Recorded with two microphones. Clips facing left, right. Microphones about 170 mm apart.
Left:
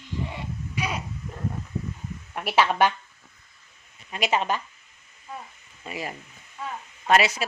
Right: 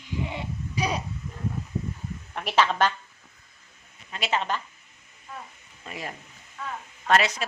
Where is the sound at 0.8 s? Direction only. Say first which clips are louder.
Right 3 dB; 35° right (ahead or behind).